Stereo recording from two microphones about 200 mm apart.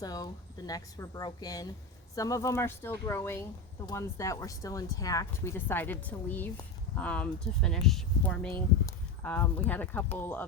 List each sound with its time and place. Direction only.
0.0 s speech: 20° left (ahead or behind)